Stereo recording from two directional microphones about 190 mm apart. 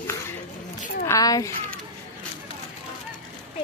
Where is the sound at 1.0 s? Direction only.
20° left (ahead or behind).